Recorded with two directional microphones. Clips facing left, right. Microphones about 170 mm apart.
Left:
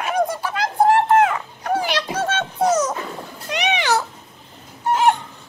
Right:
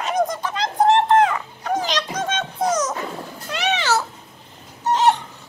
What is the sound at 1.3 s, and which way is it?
Dog, 10° left (ahead or behind).